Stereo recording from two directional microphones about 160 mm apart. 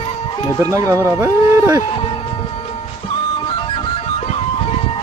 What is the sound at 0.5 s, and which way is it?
Speech, 20° right (ahead or behind).